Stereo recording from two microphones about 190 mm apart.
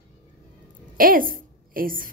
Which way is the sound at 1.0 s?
50° right (ahead or behind).